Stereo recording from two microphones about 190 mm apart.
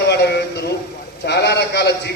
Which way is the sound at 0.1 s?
60° left (ahead or behind).